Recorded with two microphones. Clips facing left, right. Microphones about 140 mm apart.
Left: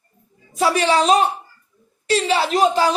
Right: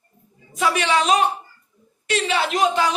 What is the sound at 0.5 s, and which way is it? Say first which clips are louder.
Speech: left 3 dB; 35° left (ahead or behind).